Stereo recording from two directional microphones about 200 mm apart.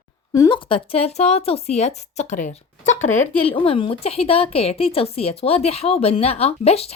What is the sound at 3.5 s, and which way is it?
A woman's voice, 25° left (ahead or behind).